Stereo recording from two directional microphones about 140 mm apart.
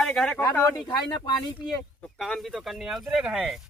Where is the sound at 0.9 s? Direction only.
30° left (ahead or behind).